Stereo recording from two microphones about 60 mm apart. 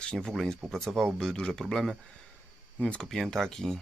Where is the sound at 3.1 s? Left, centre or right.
Centre.